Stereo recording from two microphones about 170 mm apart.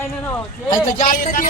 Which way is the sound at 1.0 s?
55° left (ahead or behind).